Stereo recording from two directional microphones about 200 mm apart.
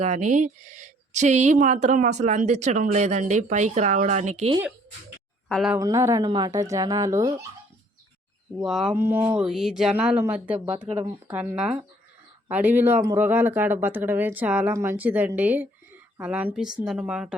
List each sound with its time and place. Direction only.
0.0 s speech: 35° right (ahead or behind)
5.5 s speech: centre (ahead or behind)
5.7 s speech: 15° right (ahead or behind)
8.6 s speech: centre (ahead or behind)